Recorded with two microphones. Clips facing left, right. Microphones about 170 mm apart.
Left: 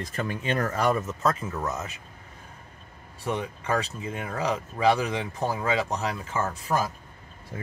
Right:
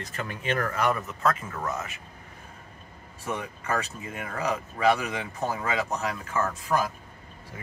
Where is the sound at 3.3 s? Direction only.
30° left (ahead or behind).